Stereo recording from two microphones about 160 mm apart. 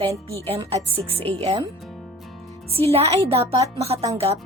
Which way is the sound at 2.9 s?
40° right (ahead or behind).